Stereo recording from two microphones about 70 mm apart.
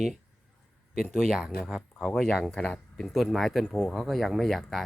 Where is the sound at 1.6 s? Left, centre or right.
Centre.